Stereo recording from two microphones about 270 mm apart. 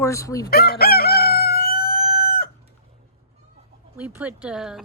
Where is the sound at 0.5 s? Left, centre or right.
Left.